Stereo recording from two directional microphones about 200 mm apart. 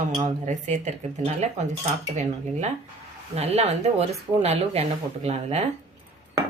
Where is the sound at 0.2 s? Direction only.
35° right (ahead or behind).